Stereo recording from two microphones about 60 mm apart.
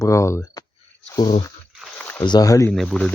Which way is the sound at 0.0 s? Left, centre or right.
Left.